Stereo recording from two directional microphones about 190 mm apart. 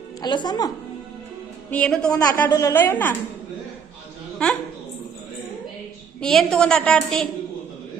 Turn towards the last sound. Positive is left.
turn(degrees=5)  # may be behind; listen again after turning